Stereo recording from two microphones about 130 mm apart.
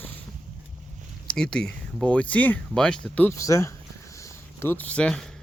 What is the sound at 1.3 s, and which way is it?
Speech, 5° left (ahead or behind).